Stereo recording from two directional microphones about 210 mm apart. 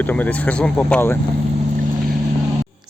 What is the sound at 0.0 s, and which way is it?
Speech, 10° left (ahead or behind).